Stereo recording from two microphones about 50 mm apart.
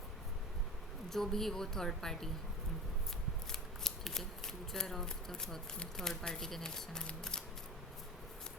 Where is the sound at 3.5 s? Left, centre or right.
Centre.